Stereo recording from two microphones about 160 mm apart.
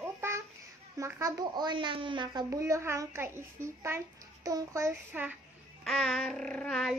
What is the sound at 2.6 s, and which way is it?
A child's voice, 15° right (ahead or behind).